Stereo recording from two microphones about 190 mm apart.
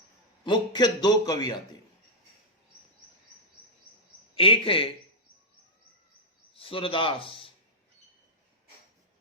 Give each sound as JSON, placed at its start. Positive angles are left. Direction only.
{"t": 0.4, "sound": "a man's voice", "side_deg": 25}
{"t": 4.4, "sound": "a man's voice", "side_deg": 30}
{"t": 6.5, "sound": "a man's voice", "side_deg": 30}